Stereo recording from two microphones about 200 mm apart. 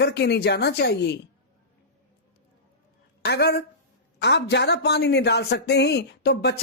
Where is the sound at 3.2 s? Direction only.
55° left (ahead or behind).